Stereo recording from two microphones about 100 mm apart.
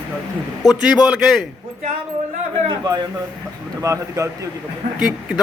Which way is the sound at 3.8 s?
30° right (ahead or behind).